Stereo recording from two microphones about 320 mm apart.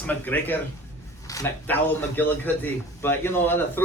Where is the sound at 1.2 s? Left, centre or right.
Centre.